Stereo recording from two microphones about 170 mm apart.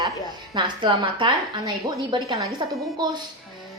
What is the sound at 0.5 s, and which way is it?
A woman's voice, 30° right (ahead or behind).